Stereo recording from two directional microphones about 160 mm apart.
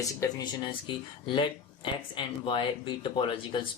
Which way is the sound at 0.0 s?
20° left (ahead or behind).